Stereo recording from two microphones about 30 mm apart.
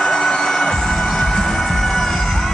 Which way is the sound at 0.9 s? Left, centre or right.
Centre.